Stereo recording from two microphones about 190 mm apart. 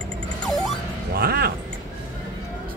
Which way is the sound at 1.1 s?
55° right (ahead or behind).